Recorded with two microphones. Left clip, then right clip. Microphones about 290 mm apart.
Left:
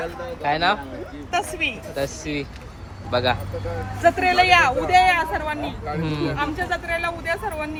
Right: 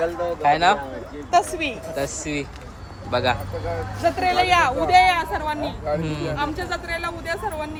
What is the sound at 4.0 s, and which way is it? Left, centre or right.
Speech, centre.